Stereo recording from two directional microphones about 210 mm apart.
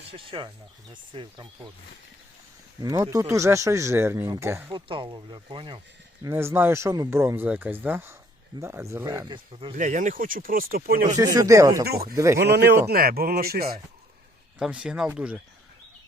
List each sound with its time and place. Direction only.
0.1 s speech: 25° right (ahead or behind)
2.8 s speech: 15° right (ahead or behind)
6.2 s speech: 10° right (ahead or behind)
9.7 s speech: 40° right (ahead or behind)
11.2 s speech: 15° right (ahead or behind)
11.9 s speech: 45° right (ahead or behind)
12.1 s speech: 15° right (ahead or behind)
12.4 s speech: 50° right (ahead or behind)
14.6 s speech: 5° right (ahead or behind)